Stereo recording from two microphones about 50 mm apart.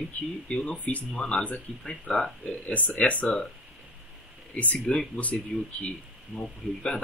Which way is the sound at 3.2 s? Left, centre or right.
Centre.